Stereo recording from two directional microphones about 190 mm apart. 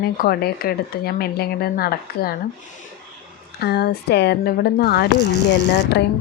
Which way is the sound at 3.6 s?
60° left (ahead or behind).